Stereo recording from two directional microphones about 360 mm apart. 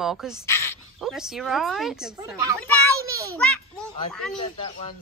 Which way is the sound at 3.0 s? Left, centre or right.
Centre.